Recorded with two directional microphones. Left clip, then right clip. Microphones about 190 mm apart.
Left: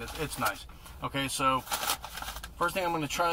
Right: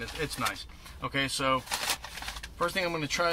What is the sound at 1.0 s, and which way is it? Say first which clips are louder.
Speech: even; 15° right (ahead or behind).